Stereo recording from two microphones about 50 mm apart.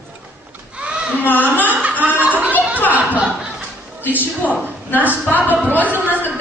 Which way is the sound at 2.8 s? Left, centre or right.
Right.